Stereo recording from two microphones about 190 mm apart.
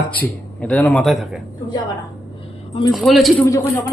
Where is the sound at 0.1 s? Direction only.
5° left (ahead or behind).